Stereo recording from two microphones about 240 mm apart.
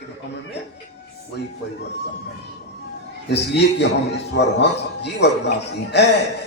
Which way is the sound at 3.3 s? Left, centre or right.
Left.